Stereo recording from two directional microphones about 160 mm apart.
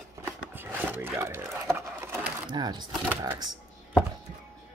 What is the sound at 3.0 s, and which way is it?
Speech, 15° right (ahead or behind).